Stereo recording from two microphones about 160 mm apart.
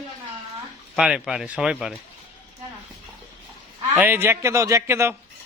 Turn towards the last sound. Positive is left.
turn(degrees=-15)  # may be behind; listen again after turning